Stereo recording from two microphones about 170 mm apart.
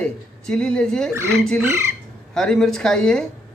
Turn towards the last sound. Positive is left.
turn(degrees=5)  # may be behind; listen again after turning